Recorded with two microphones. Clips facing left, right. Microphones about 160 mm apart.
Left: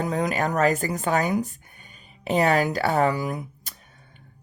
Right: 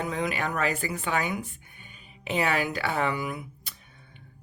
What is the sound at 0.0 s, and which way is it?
Speech, 40° left (ahead or behind).